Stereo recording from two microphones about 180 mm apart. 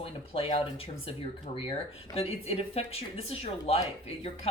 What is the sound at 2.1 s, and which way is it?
Speech, 35° left (ahead or behind).